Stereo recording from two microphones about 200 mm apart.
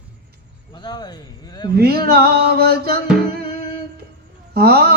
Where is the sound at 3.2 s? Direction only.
50° right (ahead or behind).